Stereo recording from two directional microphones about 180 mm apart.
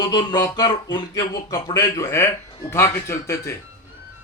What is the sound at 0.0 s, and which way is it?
Speech, 25° left (ahead or behind).